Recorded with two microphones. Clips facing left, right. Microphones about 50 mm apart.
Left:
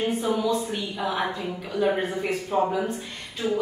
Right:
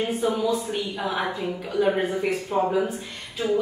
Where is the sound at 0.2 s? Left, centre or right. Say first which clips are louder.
Right 1 dB; centre.